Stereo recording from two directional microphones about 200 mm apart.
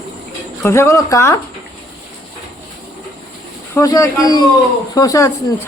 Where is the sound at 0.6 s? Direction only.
15° left (ahead or behind).